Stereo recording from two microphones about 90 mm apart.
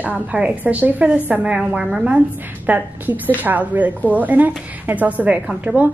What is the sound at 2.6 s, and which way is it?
A woman's voice, 20° right (ahead or behind).